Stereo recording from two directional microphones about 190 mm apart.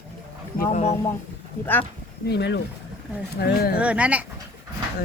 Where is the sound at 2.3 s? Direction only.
65° left (ahead or behind).